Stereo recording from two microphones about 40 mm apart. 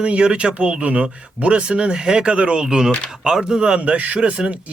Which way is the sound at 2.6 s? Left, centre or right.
Centre.